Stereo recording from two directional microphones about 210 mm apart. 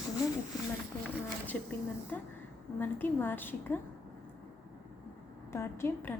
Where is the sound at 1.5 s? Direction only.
5° left (ahead or behind).